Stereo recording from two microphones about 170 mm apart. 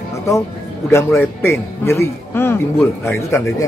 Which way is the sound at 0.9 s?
15° left (ahead or behind).